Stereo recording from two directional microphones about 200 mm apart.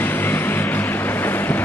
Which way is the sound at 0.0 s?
10° left (ahead or behind).